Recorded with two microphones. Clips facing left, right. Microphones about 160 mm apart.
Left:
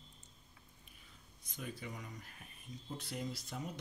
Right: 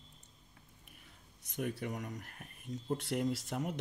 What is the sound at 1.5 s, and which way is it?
Speech, 60° right (ahead or behind).